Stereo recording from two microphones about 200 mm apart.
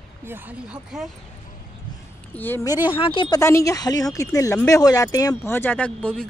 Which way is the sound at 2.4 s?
10° left (ahead or behind).